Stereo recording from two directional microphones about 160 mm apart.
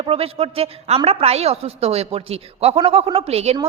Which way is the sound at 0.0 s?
35° right (ahead or behind).